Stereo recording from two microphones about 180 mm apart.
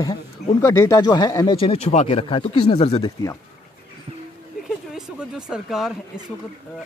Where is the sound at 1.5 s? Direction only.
30° left (ahead or behind).